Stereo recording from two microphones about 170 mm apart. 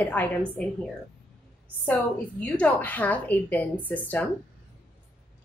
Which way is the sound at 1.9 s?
5° left (ahead or behind).